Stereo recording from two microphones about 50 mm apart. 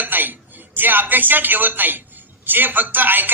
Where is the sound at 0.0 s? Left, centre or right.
Right.